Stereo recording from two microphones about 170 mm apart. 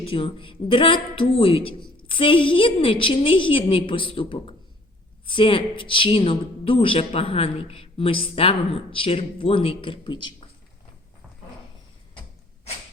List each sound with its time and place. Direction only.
0.0 s a woman's voice: 30° left (ahead or behind)